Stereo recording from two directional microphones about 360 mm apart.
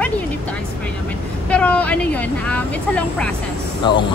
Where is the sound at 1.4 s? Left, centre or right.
Centre.